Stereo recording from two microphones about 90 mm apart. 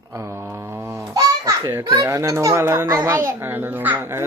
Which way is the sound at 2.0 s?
40° right (ahead or behind).